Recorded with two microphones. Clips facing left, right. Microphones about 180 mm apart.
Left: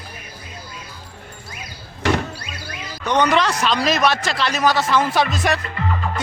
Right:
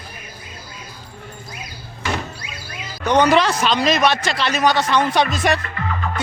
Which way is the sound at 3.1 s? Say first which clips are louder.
Right 3 dB; 35° right (ahead or behind).